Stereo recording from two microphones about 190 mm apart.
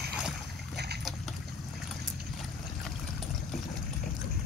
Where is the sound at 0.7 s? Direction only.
60° right (ahead or behind).